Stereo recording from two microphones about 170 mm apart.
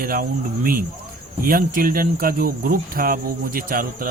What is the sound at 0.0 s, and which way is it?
Speech, 60° right (ahead or behind).